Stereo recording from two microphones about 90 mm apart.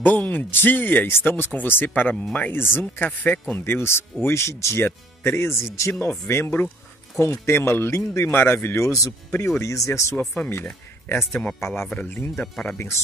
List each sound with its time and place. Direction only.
0.0 s speech: 20° left (ahead or behind)
10.1 s speech: 20° left (ahead or behind)
12.6 s speech: 30° left (ahead or behind)